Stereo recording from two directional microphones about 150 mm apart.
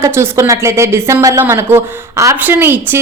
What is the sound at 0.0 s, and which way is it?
A woman's voice, 20° right (ahead or behind).